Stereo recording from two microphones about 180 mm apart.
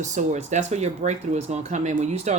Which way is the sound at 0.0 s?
40° right (ahead or behind).